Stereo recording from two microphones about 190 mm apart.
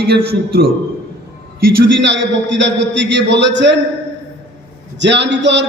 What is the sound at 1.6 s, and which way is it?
A man's voice, 70° right (ahead or behind).